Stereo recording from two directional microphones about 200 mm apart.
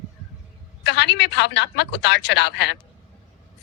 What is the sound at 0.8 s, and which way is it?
A man's voice, 60° left (ahead or behind).